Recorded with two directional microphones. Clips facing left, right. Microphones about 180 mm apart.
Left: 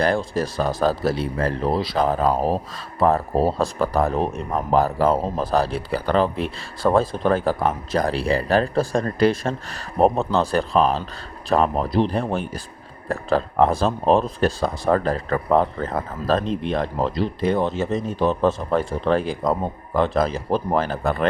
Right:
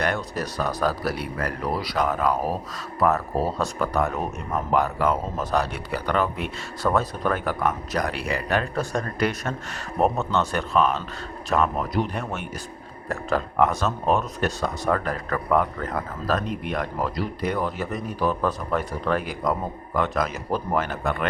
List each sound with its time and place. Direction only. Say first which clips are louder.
0.0 s speech: left 5 dB; 30° left (ahead or behind)